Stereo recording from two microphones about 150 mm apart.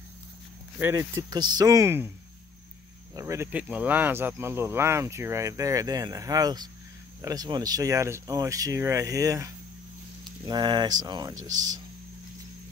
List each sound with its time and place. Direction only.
0.7 s speech: 15° right (ahead or behind)
3.2 s speech: 20° right (ahead or behind)